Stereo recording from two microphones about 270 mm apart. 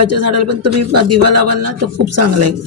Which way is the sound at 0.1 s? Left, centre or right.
Right.